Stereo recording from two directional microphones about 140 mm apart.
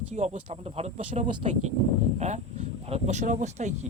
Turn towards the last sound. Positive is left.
turn(degrees=-60)  # may be behind; listen again after turning